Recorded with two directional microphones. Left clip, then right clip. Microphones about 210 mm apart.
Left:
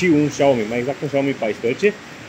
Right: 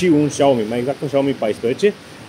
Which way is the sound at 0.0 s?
15° right (ahead or behind).